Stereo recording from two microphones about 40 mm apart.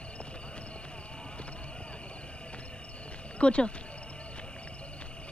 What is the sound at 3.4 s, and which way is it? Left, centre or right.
Speech, left.